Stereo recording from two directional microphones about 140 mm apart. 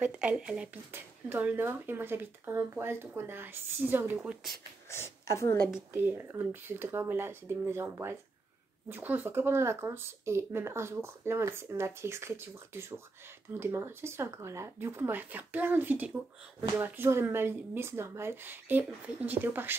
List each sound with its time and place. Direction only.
0.0 s speech: 10° right (ahead or behind)
4.8 s speech: 20° left (ahead or behind)
5.9 s speech: 15° right (ahead or behind)